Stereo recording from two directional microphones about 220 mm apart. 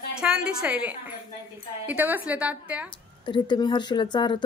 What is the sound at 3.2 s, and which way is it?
Speech, 20° left (ahead or behind).